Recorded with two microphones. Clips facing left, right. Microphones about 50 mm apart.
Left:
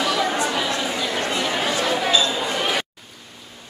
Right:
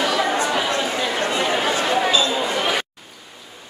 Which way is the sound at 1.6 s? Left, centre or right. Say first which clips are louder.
Right 2 dB; right.